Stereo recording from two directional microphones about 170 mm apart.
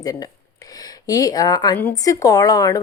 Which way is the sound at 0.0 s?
20° left (ahead or behind).